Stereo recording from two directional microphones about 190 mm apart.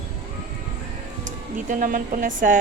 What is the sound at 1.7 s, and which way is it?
Speech, 45° right (ahead or behind).